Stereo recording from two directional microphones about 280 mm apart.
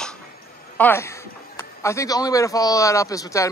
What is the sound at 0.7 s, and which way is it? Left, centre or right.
A man's voice, centre.